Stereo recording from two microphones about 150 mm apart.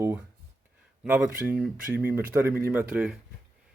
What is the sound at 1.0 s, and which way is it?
Speech, 10° right (ahead or behind).